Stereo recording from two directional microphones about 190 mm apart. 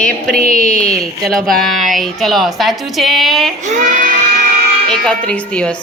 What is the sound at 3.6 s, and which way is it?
Speech, 45° right (ahead or behind).